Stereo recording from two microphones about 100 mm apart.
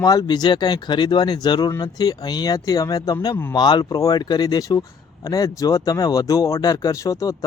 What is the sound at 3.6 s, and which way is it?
Speech, 45° left (ahead or behind).